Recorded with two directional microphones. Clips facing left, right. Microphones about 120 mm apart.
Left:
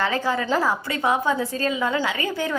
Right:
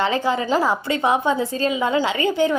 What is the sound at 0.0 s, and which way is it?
A woman's voice, 20° right (ahead or behind).